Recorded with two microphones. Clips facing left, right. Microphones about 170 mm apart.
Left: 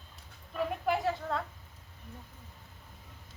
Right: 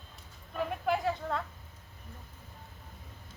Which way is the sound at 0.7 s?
Centre (ahead or behind).